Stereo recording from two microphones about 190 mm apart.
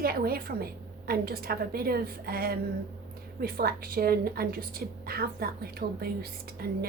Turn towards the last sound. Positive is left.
turn(degrees=-55)  # may be behind; listen again after turning